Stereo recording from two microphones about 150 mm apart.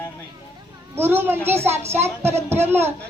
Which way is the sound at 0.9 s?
15° right (ahead or behind).